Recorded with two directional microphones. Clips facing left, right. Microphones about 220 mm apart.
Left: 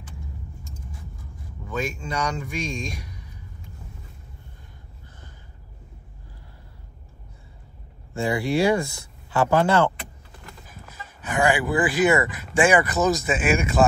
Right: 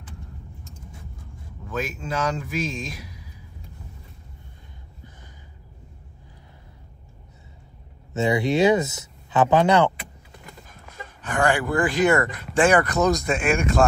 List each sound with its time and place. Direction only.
1.7 s speech: 5° right (ahead or behind)
8.1 s speech: 20° right (ahead or behind)
10.7 s speech: 5° left (ahead or behind)